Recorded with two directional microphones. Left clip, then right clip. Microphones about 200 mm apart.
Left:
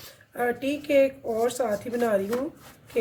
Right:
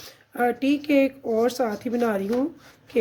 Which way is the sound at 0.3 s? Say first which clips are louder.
Right 4 dB; 50° right (ahead or behind).